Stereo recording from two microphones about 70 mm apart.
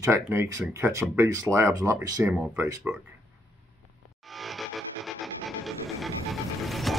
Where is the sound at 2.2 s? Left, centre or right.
Right.